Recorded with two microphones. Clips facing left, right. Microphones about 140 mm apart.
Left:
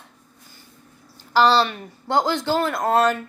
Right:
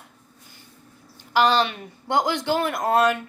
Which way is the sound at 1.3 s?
15° right (ahead or behind).